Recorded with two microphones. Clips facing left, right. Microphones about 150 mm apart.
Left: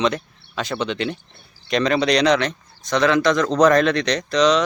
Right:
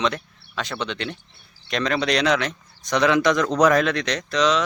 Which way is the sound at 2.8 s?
15° right (ahead or behind).